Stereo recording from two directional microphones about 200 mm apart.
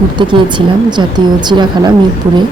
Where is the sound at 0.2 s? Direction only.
20° right (ahead or behind).